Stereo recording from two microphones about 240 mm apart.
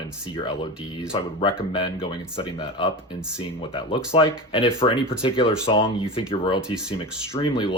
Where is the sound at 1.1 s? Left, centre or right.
Left.